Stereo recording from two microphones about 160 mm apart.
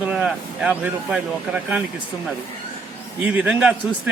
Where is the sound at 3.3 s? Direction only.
10° right (ahead or behind).